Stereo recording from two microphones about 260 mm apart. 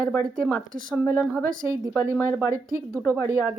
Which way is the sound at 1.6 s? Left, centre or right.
Centre.